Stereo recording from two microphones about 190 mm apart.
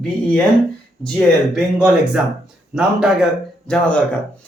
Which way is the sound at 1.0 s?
5° left (ahead or behind).